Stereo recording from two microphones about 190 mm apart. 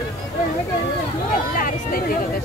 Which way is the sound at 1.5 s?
50° left (ahead or behind).